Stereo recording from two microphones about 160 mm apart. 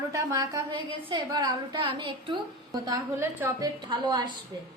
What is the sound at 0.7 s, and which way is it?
A woman's voice, 30° right (ahead or behind).